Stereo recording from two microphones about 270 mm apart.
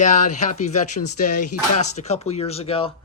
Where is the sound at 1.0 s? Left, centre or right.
Left.